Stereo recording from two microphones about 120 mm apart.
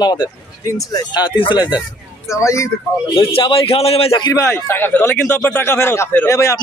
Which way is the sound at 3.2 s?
50° left (ahead or behind).